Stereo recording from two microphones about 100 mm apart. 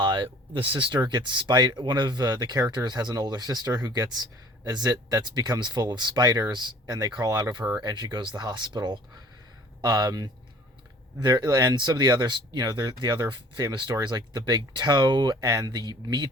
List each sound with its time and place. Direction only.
0.0 s speech: 55° right (ahead or behind)